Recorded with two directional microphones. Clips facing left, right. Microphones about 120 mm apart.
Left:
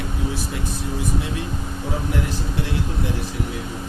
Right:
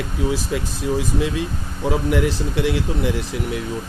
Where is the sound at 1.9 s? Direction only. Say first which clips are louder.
Right 7 dB; 90° right.